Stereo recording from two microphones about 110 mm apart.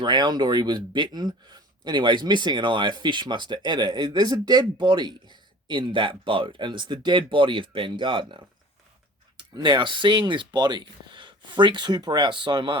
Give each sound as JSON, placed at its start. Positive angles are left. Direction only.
{"t": 0.0, "sound": "speech", "side_deg": -40}
{"t": 9.4, "sound": "speech", "side_deg": -45}